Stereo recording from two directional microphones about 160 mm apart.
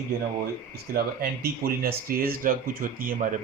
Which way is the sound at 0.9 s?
70° right (ahead or behind).